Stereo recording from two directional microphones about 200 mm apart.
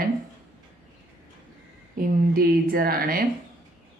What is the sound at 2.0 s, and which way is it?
A woman's voice, 45° right (ahead or behind).